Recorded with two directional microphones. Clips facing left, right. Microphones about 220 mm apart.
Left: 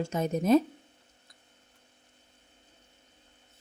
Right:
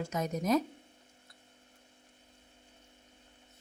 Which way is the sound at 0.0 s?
30° left (ahead or behind).